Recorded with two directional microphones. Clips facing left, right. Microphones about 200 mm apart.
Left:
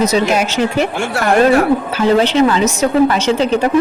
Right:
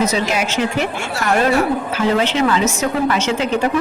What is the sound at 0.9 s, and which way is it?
Speech, 60° left (ahead or behind).